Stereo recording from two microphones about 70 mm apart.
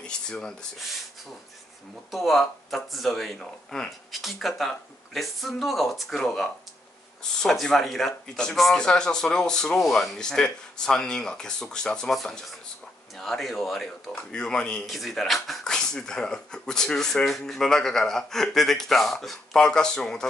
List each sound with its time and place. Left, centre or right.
0.0 s speech: centre
2.0 s speech: centre
14.9 s speech: centre